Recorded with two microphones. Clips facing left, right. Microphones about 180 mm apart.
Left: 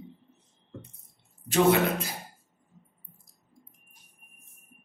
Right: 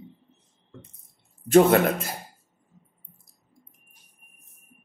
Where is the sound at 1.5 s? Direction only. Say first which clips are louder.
Right 5 dB; 50° right (ahead or behind).